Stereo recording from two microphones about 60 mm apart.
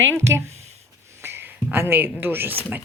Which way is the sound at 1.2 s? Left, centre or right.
Right.